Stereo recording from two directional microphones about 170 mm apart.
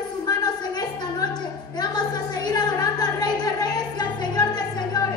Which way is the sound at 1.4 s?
25° left (ahead or behind).